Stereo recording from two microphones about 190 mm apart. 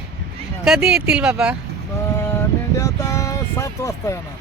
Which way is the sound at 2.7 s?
15° left (ahead or behind).